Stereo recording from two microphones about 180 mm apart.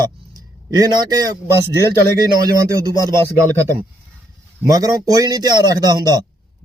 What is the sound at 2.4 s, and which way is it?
Speech, 20° right (ahead or behind).